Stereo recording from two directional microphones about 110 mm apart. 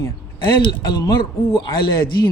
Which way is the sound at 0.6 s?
40° left (ahead or behind).